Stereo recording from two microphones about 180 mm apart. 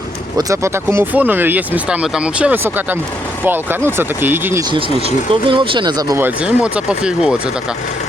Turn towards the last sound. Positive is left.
turn(degrees=-5)  # may be behind; listen again after turning